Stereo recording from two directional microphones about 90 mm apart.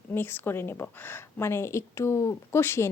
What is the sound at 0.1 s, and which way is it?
Speech, 20° left (ahead or behind).